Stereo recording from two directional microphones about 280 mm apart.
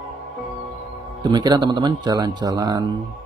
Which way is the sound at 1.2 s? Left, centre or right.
Centre.